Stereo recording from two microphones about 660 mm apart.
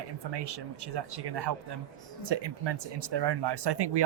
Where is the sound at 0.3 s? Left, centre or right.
Right.